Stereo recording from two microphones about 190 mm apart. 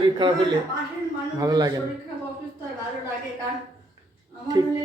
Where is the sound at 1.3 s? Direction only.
20° right (ahead or behind).